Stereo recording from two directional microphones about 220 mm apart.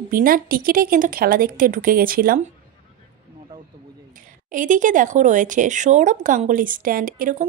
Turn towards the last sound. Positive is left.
turn(degrees=-40)  # may be behind; listen again after turning